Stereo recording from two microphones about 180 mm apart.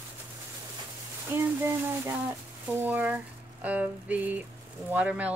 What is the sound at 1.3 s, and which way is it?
Speech, 10° right (ahead or behind).